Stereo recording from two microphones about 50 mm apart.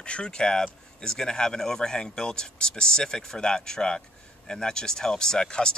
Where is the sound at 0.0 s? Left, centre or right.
Centre.